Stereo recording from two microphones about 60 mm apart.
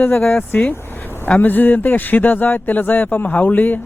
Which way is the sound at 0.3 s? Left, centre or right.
Left.